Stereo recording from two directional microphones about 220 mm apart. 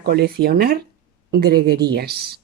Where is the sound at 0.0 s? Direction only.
45° right (ahead or behind).